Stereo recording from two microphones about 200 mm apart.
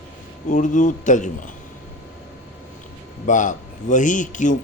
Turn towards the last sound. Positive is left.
turn(degrees=40)  # may be behind; listen again after turning